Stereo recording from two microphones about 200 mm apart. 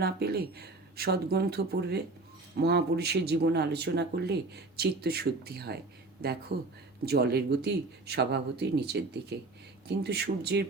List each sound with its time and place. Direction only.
0.0 s speech: 50° right (ahead or behind)